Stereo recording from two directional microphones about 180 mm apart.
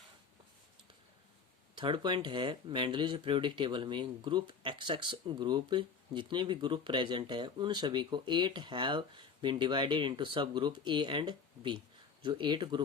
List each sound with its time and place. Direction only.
1.7 s speech: 25° right (ahead or behind)